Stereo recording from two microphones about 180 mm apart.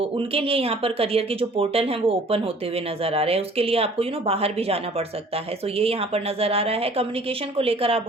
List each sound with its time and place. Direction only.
0.0 s speech: 30° right (ahead or behind)